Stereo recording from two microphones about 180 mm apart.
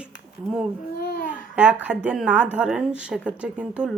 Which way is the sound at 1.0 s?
50° left (ahead or behind).